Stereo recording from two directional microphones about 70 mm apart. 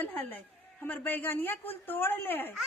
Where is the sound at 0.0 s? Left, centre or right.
Left.